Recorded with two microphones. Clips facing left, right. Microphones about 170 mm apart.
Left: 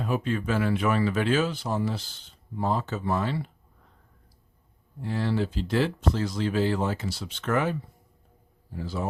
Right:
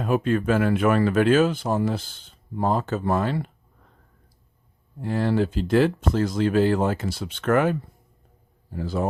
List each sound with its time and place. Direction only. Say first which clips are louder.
0.0 s speech: right 6 dB; 50° right (ahead or behind)
5.0 s speech: right 5 dB; 50° right (ahead or behind)